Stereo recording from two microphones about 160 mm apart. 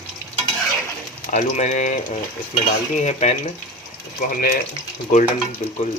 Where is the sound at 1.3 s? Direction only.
45° left (ahead or behind).